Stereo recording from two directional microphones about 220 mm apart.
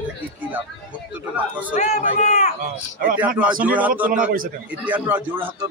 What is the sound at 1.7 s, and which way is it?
Speech, 35° left (ahead or behind).